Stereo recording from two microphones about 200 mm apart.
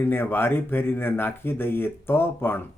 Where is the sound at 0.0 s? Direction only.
10° left (ahead or behind).